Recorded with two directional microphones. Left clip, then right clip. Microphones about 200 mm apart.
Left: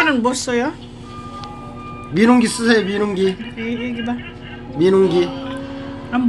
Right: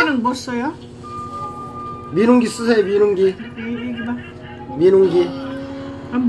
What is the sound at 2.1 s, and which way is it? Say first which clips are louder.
Speech: even; 50° left (ahead or behind).